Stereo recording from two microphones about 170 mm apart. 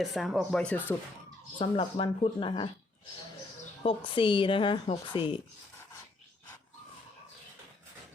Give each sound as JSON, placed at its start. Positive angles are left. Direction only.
{"t": 0.0, "sound": "speech", "side_deg": 0}
{"t": 1.5, "sound": "speech", "side_deg": 30}
{"t": 3.8, "sound": "a woman's voice", "side_deg": 30}